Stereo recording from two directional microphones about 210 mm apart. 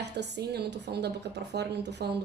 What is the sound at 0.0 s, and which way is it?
A woman's voice, 55° right (ahead or behind).